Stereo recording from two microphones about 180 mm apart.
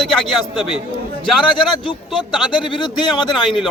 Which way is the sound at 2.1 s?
Centre (ahead or behind).